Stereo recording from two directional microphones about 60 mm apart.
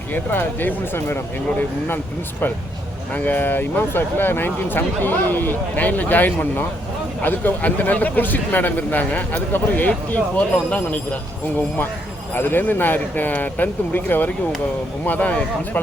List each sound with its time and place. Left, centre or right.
0.1 s speech: left
3.1 s a man's voice: left
12.3 s a man's voice: left